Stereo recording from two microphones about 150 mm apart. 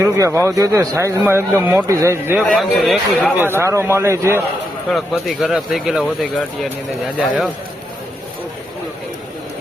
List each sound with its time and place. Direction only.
0.0 s speech: 20° right (ahead or behind)
2.5 s speech: centre (ahead or behind)
3.3 s speech: 15° right (ahead or behind)
4.9 s speech: centre (ahead or behind)